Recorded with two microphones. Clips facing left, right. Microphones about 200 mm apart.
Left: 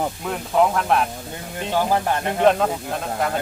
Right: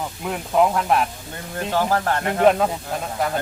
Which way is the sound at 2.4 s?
5° right (ahead or behind).